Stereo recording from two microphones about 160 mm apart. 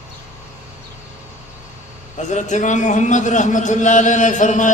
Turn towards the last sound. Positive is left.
turn(degrees=50)  # may be behind; listen again after turning